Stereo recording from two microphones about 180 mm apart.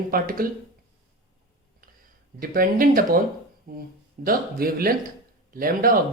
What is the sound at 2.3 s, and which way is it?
Speech, 50° right (ahead or behind).